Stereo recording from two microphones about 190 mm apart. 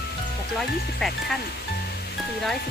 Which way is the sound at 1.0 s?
Centre (ahead or behind).